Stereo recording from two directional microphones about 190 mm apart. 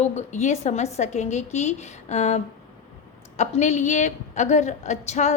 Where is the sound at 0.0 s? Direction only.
35° left (ahead or behind).